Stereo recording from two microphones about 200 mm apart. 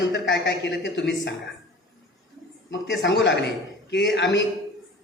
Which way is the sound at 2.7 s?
65° left (ahead or behind).